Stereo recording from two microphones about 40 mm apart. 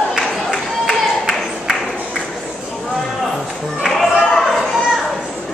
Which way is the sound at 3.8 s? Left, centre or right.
Centre.